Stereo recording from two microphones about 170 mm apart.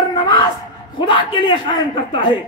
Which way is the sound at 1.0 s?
30° left (ahead or behind).